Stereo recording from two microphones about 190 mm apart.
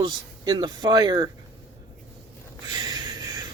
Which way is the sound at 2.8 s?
20° right (ahead or behind).